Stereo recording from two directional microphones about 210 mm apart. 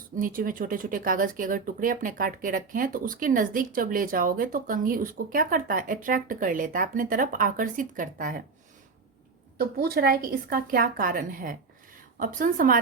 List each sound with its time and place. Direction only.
0.2 s speech: 40° right (ahead or behind)
9.6 s a woman's voice: 45° right (ahead or behind)